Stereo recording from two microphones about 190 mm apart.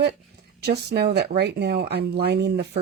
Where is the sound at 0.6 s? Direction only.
60° right (ahead or behind).